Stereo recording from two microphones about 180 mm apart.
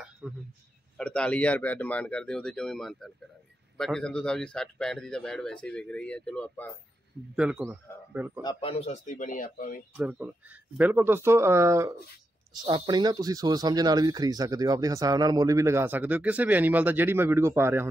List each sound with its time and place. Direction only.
0.2 s a man's voice: 5° right (ahead or behind)
7.3 s speech: 5° right (ahead or behind)
8.4 s speech: 25° left (ahead or behind); by 9.8 s 50° left (ahead or behind)
9.9 s speech: 10° right (ahead or behind)